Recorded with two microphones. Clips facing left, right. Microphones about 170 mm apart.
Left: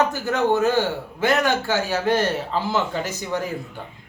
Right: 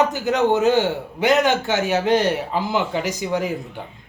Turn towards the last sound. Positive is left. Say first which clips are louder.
# right 4 dB
turn(degrees=-15)  # may be behind; listen again after turning